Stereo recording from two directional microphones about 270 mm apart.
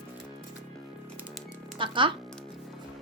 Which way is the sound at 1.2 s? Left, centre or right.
Centre.